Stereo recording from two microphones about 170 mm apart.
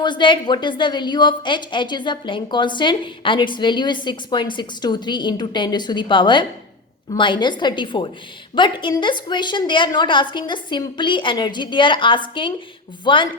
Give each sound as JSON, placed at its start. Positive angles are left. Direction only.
{"t": 0.0, "sound": "a woman's voice", "side_deg": 30}